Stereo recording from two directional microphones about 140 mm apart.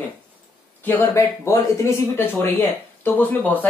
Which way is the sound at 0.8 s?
15° left (ahead or behind).